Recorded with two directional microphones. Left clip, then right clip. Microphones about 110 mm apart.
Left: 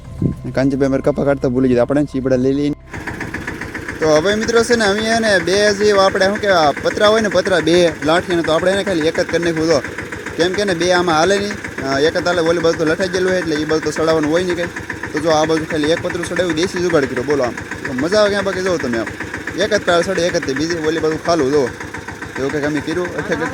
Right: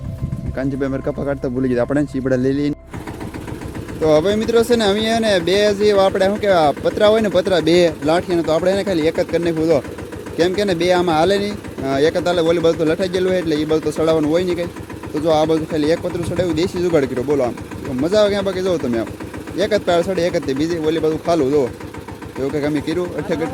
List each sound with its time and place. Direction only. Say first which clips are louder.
0.8 s speech: left 6 dB; 40° left (ahead or behind)
1.9 s speech: left 2 dB; centre (ahead or behind)
4.0 s speech: left 1 dB; 20° right (ahead or behind)
10.3 s speech: even; 25° right (ahead or behind)